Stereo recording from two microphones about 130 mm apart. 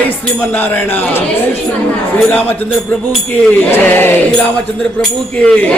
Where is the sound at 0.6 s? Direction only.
15° left (ahead or behind).